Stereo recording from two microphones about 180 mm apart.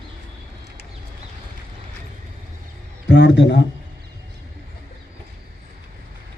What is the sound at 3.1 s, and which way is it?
Speech, 80° left.